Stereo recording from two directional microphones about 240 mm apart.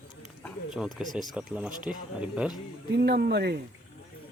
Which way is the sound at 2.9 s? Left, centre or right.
Right.